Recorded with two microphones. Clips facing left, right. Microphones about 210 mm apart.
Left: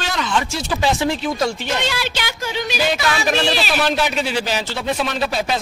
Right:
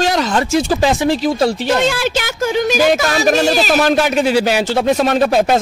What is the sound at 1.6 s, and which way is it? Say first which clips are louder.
Speech: right 8 dB; 50° right (ahead or behind).